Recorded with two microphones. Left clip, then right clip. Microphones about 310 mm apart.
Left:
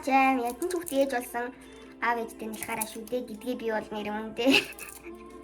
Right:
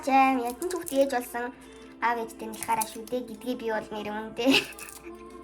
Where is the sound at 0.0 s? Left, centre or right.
Centre.